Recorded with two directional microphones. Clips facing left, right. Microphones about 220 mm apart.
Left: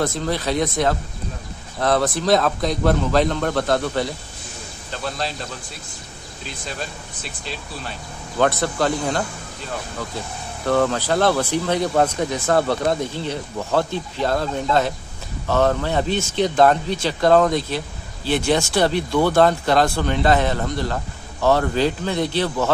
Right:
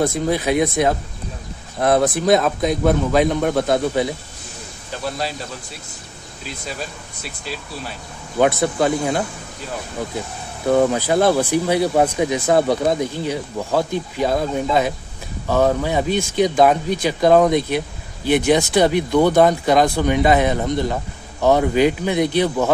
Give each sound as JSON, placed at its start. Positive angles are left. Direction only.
{"t": 0.0, "sound": "speech", "side_deg": -10}
{"t": 8.4, "sound": "speech", "side_deg": -10}
{"t": 10.6, "sound": "speech", "side_deg": -15}